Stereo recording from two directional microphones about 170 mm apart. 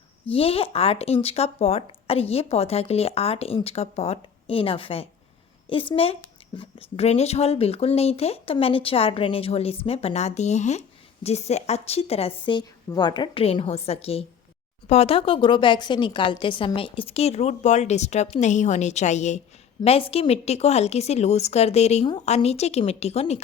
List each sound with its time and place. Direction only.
0.3 s speech: 35° left (ahead or behind)